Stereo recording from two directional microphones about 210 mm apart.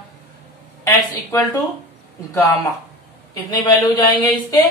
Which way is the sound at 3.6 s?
20° left (ahead or behind).